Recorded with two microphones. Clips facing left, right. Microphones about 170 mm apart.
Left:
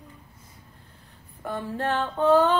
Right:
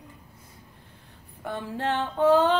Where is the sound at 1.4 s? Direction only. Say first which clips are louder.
Left 1 dB; 15° right (ahead or behind).